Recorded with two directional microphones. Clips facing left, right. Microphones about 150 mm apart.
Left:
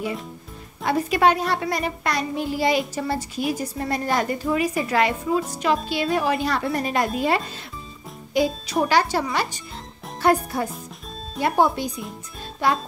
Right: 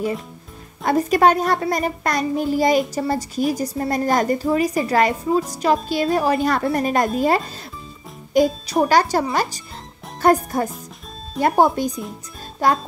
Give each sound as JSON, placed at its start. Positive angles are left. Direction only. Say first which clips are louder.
{"t": 0.8, "sound": "a child's voice", "louder": "right 3 dB", "side_deg": -45}